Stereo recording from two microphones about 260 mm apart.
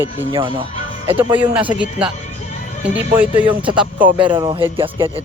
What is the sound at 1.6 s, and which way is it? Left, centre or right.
Speech, centre.